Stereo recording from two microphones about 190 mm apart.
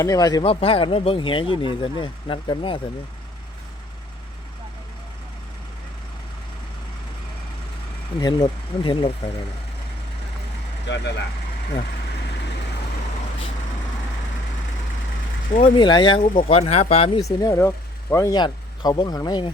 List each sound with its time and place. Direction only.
0.0 s speech: 20° left (ahead or behind)
8.2 s speech: 25° left (ahead or behind)
10.8 s speech: 65° left (ahead or behind)
15.6 s speech: 25° left (ahead or behind)
17.2 s speech: 15° left (ahead or behind)